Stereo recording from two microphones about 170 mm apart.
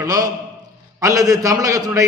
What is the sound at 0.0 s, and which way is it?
A man's voice, 20° right (ahead or behind).